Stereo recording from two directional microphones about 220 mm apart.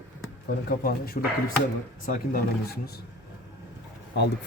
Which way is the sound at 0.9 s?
45° left (ahead or behind).